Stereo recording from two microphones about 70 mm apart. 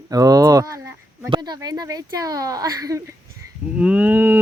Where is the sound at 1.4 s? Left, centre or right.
Right.